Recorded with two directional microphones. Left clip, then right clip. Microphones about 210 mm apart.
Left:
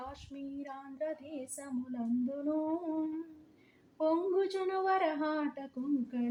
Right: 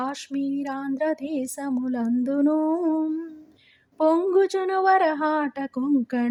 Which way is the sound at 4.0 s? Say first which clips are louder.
Right 11 dB; 45° right (ahead or behind).